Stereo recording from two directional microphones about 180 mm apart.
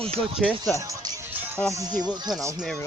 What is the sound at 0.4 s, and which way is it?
Speech, centre (ahead or behind).